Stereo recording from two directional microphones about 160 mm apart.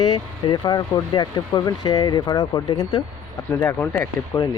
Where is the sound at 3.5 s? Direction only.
15° left (ahead or behind).